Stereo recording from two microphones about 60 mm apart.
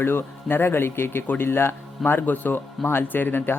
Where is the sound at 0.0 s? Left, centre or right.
Left.